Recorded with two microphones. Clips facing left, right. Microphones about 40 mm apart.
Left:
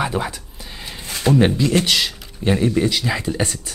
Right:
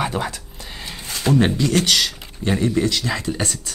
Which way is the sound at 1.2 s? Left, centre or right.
Centre.